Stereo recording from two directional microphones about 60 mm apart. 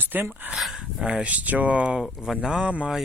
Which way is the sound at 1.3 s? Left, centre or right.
Right.